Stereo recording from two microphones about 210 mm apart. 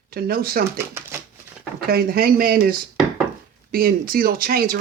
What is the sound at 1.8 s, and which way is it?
Dishes, 45° right (ahead or behind).